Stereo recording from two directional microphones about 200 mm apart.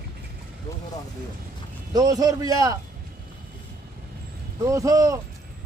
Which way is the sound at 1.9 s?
20° right (ahead or behind).